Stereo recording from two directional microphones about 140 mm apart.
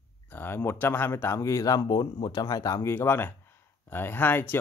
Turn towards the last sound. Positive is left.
turn(degrees=15)  # may be behind; listen again after turning